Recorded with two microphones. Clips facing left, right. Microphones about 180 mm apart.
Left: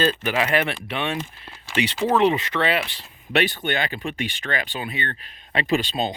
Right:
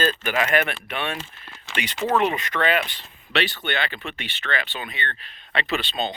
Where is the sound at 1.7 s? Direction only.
30° left (ahead or behind).